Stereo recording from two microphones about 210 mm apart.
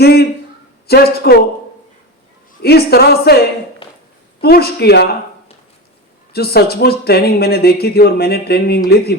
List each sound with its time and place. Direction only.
0.0 s a sound: 50° left (ahead or behind)
0.9 s speech: 50° left (ahead or behind)
2.6 s speech: 50° left (ahead or behind)
6.3 s speech: 50° left (ahead or behind)